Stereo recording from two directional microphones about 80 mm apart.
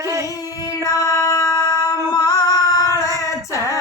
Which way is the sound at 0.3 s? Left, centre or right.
Left.